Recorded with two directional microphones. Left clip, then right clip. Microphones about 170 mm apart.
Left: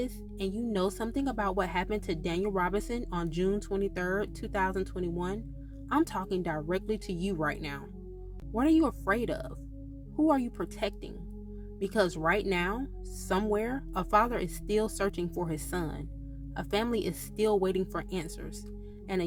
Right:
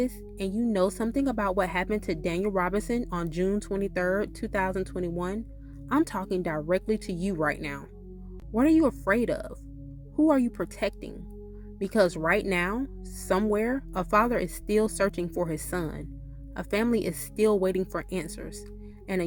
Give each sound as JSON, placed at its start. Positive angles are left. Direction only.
{"t": 0.0, "sound": "speech", "side_deg": -40}